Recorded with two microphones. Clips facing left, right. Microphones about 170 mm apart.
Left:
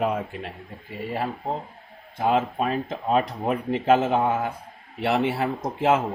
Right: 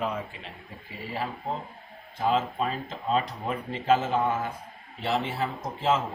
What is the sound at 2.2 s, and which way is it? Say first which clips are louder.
Speech: left 3 dB; 60° left (ahead or behind).